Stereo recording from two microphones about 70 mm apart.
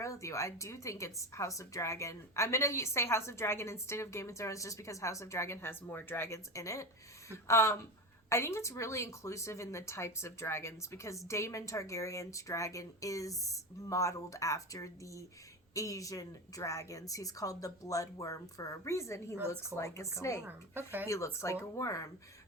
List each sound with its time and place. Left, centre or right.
0.0 s a woman's voice: left
20.7 s speech: right
21.4 s a woman's voice: left